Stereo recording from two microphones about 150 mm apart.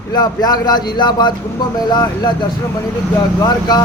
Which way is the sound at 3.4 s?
25° left (ahead or behind).